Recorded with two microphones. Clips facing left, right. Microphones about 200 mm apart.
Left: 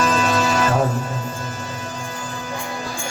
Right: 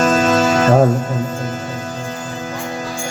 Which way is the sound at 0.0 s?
45° right (ahead or behind).